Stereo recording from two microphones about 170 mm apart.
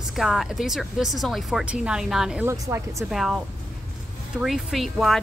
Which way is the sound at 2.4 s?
20° right (ahead or behind).